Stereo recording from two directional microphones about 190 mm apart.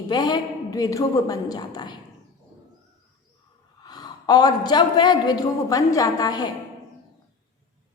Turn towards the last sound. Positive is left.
turn(degrees=20)  # may be behind; listen again after turning